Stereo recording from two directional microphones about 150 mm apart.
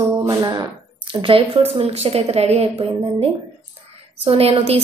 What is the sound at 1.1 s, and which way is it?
A woman's voice, 35° right (ahead or behind).